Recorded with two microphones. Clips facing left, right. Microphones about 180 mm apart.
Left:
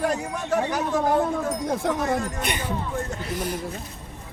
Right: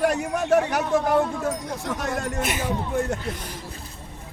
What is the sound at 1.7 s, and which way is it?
Speech, 55° left (ahead or behind).